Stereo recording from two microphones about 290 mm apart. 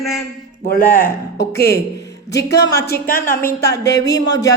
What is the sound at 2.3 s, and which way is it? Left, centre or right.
Speech, left.